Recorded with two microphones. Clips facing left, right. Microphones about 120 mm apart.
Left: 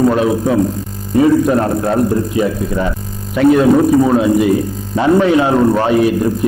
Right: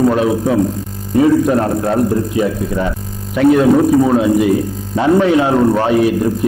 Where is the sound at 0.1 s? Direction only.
25° left (ahead or behind).